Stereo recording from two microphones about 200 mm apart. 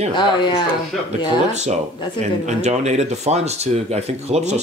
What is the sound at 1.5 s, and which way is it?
Speech, 35° right (ahead or behind).